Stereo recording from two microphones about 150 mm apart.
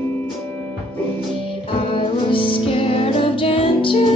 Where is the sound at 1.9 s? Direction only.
35° left (ahead or behind).